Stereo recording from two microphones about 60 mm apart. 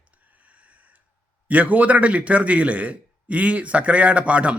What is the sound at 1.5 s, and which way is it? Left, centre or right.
A man's voice, right.